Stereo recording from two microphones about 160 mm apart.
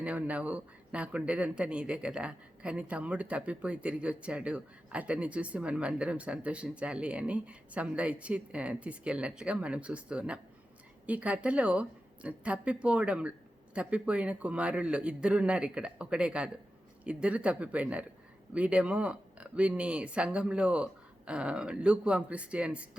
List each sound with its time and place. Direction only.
0.0 s speech: 10° right (ahead or behind)